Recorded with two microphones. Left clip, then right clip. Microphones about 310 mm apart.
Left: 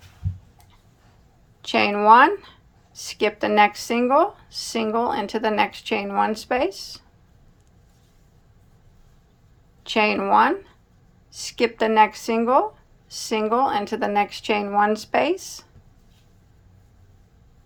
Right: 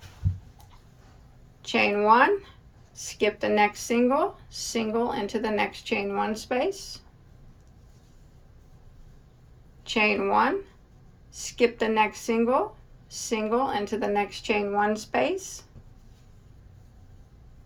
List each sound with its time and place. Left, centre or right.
1.6 s speech: centre
9.8 s speech: centre